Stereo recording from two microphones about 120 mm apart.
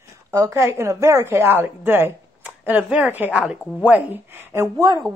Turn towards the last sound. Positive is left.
turn(degrees=-25)  # may be behind; listen again after turning